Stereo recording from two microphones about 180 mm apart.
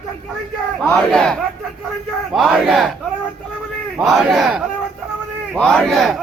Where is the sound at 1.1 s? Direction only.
5° left (ahead or behind).